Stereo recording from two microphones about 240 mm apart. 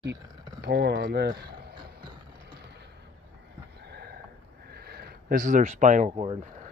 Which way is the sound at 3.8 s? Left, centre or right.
Right.